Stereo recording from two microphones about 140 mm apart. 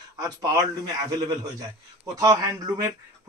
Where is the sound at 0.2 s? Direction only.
25° right (ahead or behind).